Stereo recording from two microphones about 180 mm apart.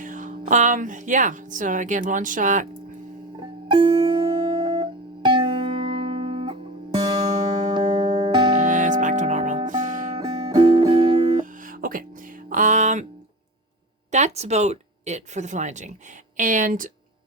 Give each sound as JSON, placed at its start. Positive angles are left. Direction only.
{"t": 0.0, "sound": "speech", "side_deg": -45}
{"t": 3.7, "sound": "music", "side_deg": -30}
{"t": 8.6, "sound": "music", "side_deg": -45}
{"t": 10.2, "sound": "music", "side_deg": -30}
{"t": 11.3, "sound": "music", "side_deg": -45}
{"t": 14.1, "sound": "speech", "side_deg": -40}